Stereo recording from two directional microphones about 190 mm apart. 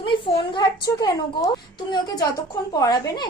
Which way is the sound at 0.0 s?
25° left (ahead or behind).